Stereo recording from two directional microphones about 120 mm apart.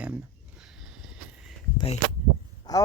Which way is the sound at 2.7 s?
35° left (ahead or behind).